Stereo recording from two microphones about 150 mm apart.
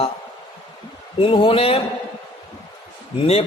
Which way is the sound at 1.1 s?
35° left (ahead or behind).